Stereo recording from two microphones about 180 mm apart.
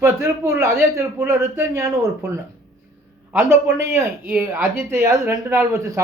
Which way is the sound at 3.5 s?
15° right (ahead or behind).